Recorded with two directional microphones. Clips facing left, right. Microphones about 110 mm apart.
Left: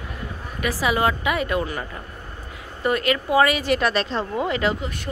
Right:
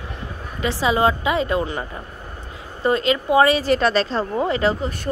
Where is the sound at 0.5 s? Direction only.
25° right (ahead or behind).